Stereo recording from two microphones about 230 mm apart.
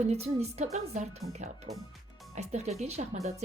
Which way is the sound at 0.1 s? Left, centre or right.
Right.